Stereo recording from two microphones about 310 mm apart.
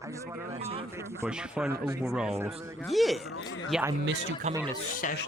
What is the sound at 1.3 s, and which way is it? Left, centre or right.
Speech, centre.